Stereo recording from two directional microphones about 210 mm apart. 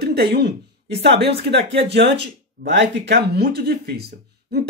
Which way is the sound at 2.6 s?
45° right (ahead or behind).